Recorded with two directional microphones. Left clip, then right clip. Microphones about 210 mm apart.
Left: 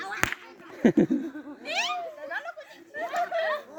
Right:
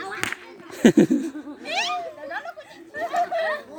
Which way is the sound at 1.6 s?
5° left (ahead or behind).